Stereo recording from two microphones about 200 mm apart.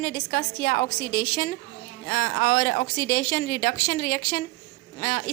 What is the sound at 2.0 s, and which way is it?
A woman's voice, 45° left (ahead or behind).